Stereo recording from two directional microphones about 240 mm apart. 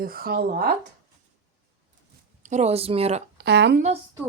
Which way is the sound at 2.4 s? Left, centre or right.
Right.